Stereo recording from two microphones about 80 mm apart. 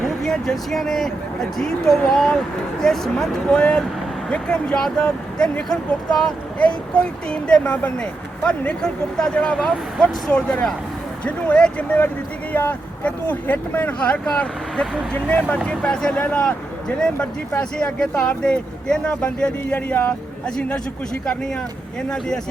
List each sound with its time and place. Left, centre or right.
0.0 s speech: centre
12.5 s speech: left; by 21.6 s centre